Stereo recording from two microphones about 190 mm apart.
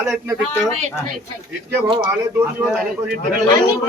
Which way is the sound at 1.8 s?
20° right (ahead or behind).